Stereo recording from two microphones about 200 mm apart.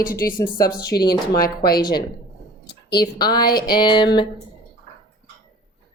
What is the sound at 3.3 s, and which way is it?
Speech, 50° left (ahead or behind).